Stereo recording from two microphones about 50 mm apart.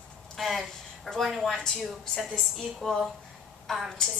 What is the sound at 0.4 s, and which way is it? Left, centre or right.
Speech, centre.